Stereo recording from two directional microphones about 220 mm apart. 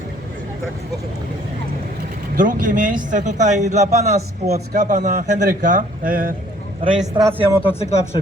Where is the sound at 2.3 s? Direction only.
35° right (ahead or behind).